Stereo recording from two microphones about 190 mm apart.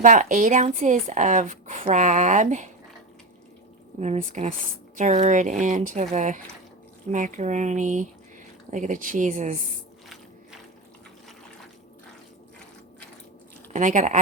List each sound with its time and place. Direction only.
0.0 s speech: 45° right (ahead or behind)
4.0 s speech: 40° right (ahead or behind)
13.7 s speech: 40° right (ahead or behind)